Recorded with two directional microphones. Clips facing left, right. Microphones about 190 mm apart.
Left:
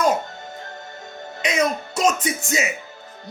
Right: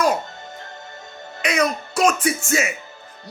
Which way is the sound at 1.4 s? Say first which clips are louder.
Even; 20° left (ahead or behind).